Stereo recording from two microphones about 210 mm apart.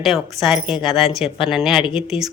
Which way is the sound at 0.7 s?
25° left (ahead or behind).